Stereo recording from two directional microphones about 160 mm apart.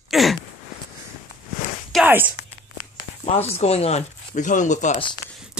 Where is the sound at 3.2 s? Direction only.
40° left (ahead or behind).